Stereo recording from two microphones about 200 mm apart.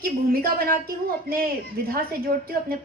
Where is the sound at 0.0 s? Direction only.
45° right (ahead or behind).